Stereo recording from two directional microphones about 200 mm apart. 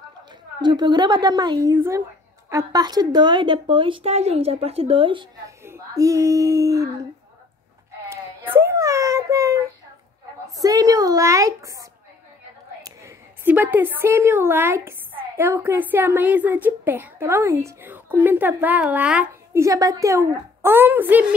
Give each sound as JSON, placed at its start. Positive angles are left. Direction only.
{"t": 0.6, "sound": "a woman's voice", "side_deg": -20}
{"t": 5.7, "sound": "speech", "side_deg": -15}
{"t": 8.1, "sound": "a sound", "side_deg": -10}
{"t": 10.6, "sound": "a woman's voice", "side_deg": -20}
{"t": 12.8, "sound": "a woman's voice", "side_deg": -10}